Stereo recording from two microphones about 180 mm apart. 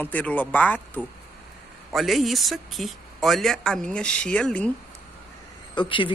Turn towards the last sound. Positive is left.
turn(degrees=25)  # may be behind; listen again after turning